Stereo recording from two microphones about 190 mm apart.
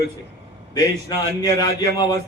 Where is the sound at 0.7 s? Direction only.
20° left (ahead or behind).